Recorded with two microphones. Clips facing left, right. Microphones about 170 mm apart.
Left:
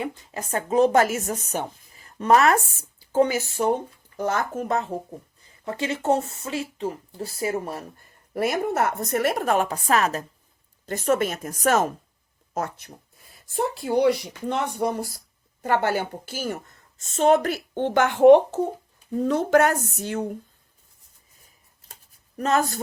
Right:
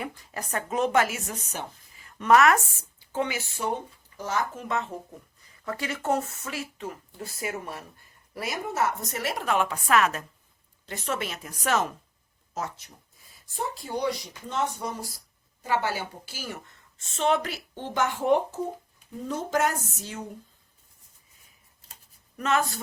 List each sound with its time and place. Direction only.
0.0 s speech: 25° left (ahead or behind); by 3.7 s 40° left (ahead or behind)
4.2 s speech: 55° left (ahead or behind); by 4.9 s 40° left (ahead or behind)
5.4 s speech: 25° left (ahead or behind)
8.3 s speech: 55° left (ahead or behind); by 10.2 s 35° left (ahead or behind)
10.8 s speech: 45° left (ahead or behind)
12.5 s speech: 55° left (ahead or behind)
22.4 s speech: 40° left (ahead or behind)